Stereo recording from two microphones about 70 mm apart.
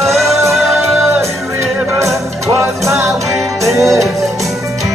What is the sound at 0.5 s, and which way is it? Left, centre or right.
Music, centre.